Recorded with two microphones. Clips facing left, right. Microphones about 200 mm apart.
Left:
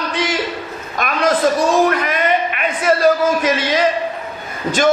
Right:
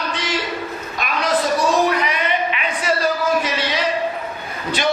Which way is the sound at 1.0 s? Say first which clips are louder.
Left 5 dB; 50° left (ahead or behind).